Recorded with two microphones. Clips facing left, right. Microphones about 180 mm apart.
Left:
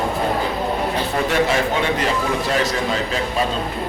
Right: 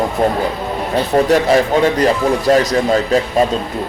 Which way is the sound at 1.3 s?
40° right (ahead or behind).